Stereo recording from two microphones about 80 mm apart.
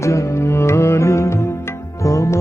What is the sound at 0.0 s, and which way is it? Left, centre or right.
Music, left.